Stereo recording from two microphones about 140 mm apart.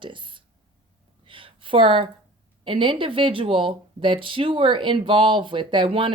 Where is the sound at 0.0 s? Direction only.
35° right (ahead or behind).